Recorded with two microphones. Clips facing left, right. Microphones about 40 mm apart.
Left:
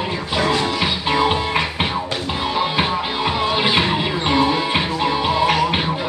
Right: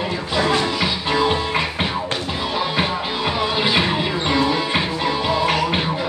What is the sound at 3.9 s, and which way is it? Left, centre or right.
Music, centre.